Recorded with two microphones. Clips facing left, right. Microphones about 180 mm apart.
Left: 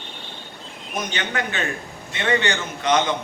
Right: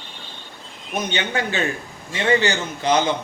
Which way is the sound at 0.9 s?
30° right (ahead or behind).